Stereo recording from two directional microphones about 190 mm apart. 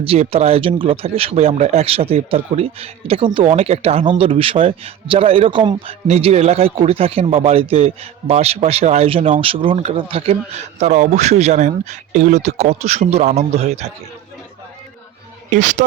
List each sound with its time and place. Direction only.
0.0 s speech: 30° right (ahead or behind)
15.4 s speech: 40° right (ahead or behind)